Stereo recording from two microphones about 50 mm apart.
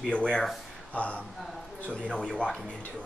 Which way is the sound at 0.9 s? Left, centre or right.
Left.